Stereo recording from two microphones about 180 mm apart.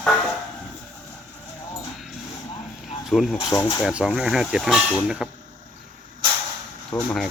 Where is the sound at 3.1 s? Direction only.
Centre (ahead or behind).